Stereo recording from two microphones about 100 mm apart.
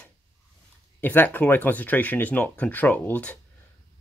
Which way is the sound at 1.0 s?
20° left (ahead or behind).